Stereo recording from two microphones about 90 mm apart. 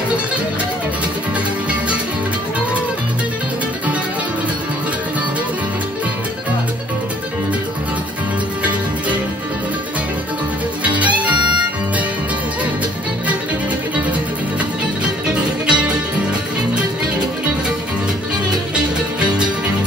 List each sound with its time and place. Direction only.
10.8 s music: 15° right (ahead or behind)
15.3 s music: 10° right (ahead or behind)